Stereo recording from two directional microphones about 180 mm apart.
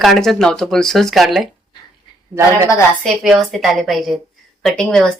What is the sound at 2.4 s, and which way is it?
Speech, 15° right (ahead or behind).